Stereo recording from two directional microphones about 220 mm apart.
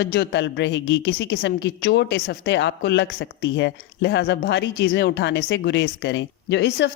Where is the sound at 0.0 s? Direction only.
50° left (ahead or behind).